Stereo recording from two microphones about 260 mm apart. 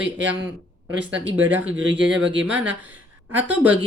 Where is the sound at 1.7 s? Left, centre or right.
Right.